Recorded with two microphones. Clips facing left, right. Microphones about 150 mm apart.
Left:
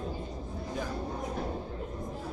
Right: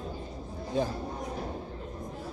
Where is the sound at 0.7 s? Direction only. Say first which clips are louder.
Right 8 dB; 25° right (ahead or behind).